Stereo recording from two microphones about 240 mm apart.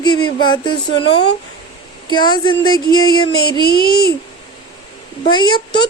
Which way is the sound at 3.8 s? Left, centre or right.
Left.